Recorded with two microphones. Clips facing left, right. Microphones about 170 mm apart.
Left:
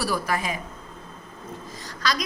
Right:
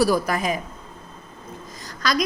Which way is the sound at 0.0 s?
40° right (ahead or behind).